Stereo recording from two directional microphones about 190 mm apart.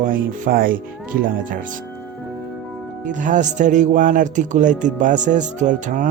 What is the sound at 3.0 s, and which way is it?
Speech, 40° right (ahead or behind).